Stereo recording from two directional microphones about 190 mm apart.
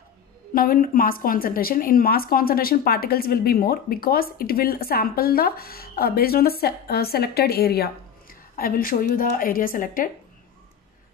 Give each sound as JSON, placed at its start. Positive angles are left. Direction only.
{"t": 0.6, "sound": "a woman's voice", "side_deg": 50}